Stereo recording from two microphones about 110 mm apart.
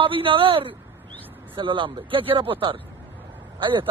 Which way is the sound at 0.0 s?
55° right (ahead or behind).